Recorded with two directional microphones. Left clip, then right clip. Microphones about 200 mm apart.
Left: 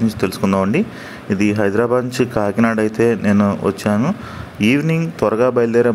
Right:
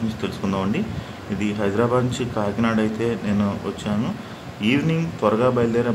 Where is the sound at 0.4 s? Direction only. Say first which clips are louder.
Left 8 dB; 20° left (ahead or behind).